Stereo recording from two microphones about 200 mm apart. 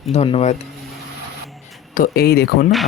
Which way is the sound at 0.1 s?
30° left (ahead or behind).